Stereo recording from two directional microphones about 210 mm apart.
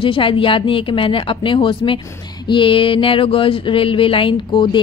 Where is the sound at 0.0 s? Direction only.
25° left (ahead or behind).